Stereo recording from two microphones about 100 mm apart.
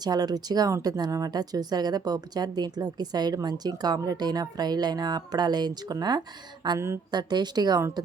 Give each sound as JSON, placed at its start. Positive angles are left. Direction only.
{"t": 0.0, "sound": "speech", "side_deg": -40}
{"t": 7.8, "sound": "speech", "side_deg": -30}